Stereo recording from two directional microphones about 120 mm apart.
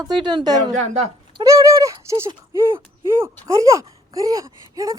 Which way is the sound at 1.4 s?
25° right (ahead or behind).